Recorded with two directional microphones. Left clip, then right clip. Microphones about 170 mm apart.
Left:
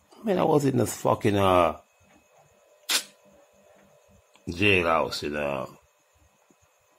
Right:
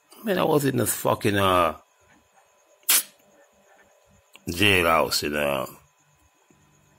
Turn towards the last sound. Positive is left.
turn(degrees=-10)  # may be behind; listen again after turning